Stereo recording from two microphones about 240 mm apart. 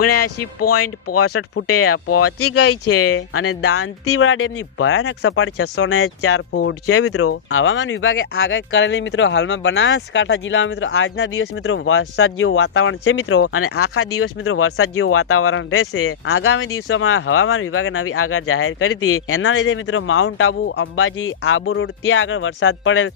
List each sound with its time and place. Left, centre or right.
0.0 s speech: left